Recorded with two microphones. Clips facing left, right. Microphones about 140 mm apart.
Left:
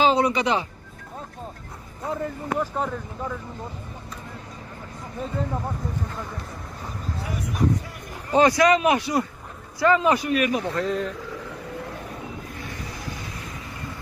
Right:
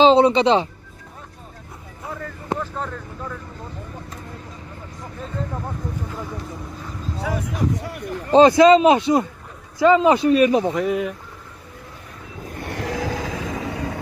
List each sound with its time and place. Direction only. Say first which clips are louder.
0.0 s speech: right 7 dB; 25° right (ahead or behind)
2.1 s speech: left 1 dB; 20° left (ahead or behind)
5.4 s speech: even; 5° left (ahead or behind)
7.2 s speech: right 1 dB; 90° right; by 8.4 s 65° right (ahead or behind)
8.4 s speech: right 7 dB; 25° right (ahead or behind)
10.7 s speech: right 4 dB; 10° right (ahead or behind)
12.5 s vehicle: right 9 dB; 70° right (ahead or behind); by 13.9 s 90° right